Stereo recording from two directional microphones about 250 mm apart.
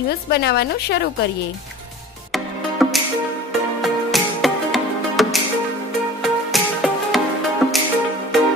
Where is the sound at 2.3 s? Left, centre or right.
Centre.